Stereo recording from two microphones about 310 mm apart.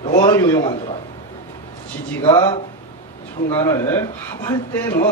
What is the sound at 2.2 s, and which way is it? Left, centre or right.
Speech, centre.